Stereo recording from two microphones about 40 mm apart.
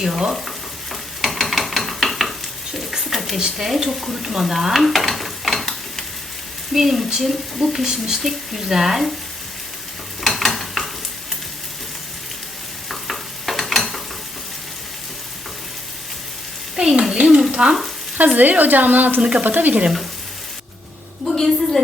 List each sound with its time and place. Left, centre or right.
0.0 s a woman's voice: centre
0.4 s stir: centre
2.9 s a sound: centre
3.8 s stir: centre
6.7 s a woman's voice: centre
10.2 s stir: centre
12.9 s stir: centre
16.7 s a sound: right
17.7 s frying: centre
18.3 s speech: right
19.2 s speech: right
19.5 s speech: right
21.2 s a sound: centre